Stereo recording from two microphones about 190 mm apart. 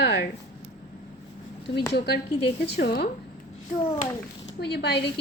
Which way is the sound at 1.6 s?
60° left (ahead or behind).